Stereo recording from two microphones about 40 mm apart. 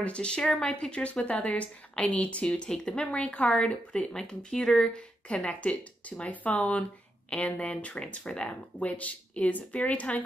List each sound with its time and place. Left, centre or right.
0.0 s a woman's voice: left
4.1 s speech: centre
5.3 s speech: left